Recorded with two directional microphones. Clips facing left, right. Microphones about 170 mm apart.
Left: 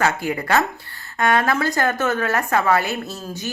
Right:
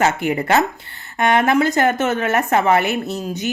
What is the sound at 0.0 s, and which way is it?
A woman's voice, 20° right (ahead or behind).